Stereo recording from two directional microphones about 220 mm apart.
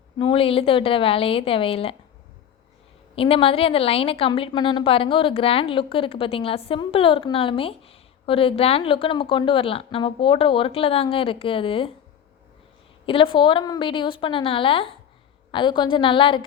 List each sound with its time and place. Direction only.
0.2 s a woman's voice: 25° left (ahead or behind)
3.2 s a woman's voice: 25° left (ahead or behind)
13.1 s a woman's voice: 25° left (ahead or behind)